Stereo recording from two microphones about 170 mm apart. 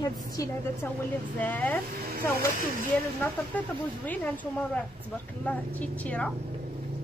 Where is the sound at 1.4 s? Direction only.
10° left (ahead or behind).